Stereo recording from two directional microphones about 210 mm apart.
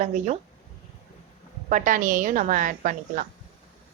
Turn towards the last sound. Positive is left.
turn(degrees=-40)  # may be behind; listen again after turning